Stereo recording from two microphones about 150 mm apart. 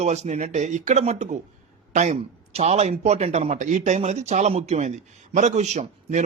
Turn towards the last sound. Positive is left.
turn(degrees=-50)  # may be behind; listen again after turning